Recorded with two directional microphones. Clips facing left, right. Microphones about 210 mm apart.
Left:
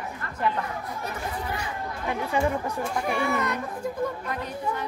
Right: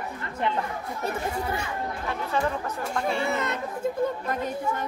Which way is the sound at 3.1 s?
25° right (ahead or behind).